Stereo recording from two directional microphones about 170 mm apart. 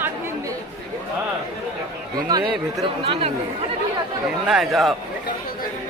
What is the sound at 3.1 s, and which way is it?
Speech, 35° right (ahead or behind).